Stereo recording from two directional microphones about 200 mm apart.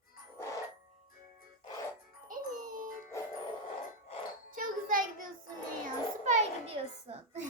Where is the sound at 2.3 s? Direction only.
40° right (ahead or behind).